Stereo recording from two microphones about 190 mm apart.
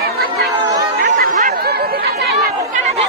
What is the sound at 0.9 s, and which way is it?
Chatter, 45° right (ahead or behind).